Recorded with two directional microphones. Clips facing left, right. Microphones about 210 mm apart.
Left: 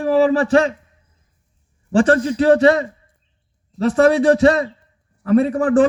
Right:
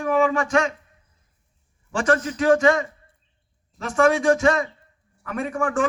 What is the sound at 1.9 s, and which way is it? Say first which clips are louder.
A man's voice: left 7 dB; 35° left (ahead or behind).